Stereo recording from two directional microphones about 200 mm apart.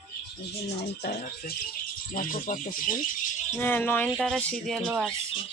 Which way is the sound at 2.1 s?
45° left (ahead or behind).